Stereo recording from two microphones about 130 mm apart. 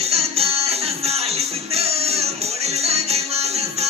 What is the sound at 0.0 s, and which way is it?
Music, 50° right (ahead or behind).